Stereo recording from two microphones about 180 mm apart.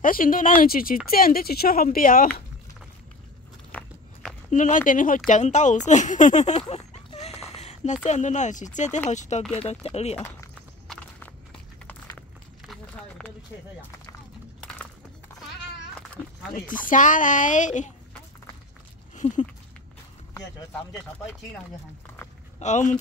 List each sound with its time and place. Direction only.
0.0 s speech: 50° left (ahead or behind)
3.7 s walk: centre (ahead or behind)
4.5 s speech: 45° left (ahead or behind)
10.9 s walk: 5° left (ahead or behind)
11.9 s a sound: 10° left (ahead or behind)
14.6 s horse: 5° left (ahead or behind)
16.5 s speech: 50° left (ahead or behind)
19.1 s a sound: 45° left (ahead or behind)
22.6 s speech: 40° left (ahead or behind)